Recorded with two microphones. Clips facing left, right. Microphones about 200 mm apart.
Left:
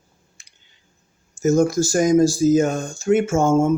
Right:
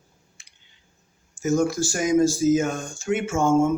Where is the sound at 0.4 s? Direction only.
40° left (ahead or behind).